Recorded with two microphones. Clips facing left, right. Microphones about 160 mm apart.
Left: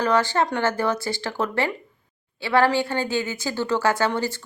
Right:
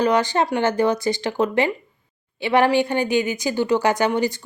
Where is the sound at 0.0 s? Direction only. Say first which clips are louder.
Right 2 dB; 15° right (ahead or behind).